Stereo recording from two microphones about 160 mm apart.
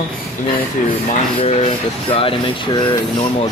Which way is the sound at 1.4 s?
40° left (ahead or behind).